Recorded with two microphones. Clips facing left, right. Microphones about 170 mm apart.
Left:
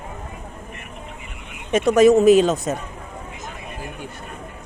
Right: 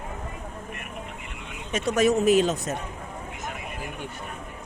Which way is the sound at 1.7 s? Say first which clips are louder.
Left 8 dB; 60° left (ahead or behind).